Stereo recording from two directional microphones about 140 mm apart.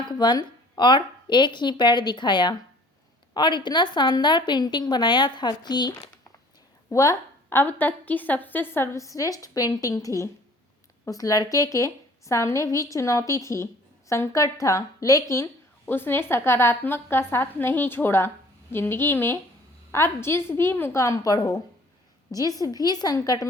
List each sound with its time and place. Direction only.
0.1 s a woman's voice: 30° left (ahead or behind)
6.9 s a woman's voice: 20° left (ahead or behind)